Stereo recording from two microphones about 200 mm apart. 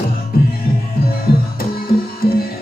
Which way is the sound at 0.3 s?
50° left (ahead or behind).